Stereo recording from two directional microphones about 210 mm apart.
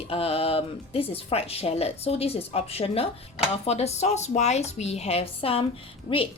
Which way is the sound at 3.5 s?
30° left (ahead or behind).